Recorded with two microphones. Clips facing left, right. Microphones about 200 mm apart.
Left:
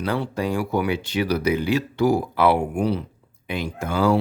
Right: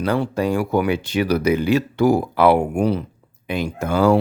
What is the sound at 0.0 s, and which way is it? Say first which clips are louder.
Speech: right 4 dB; 45° right (ahead or behind).